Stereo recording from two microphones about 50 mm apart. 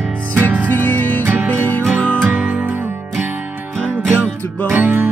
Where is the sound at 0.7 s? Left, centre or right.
Left.